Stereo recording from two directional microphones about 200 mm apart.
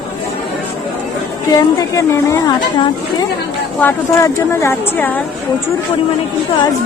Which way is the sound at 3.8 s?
10° left (ahead or behind).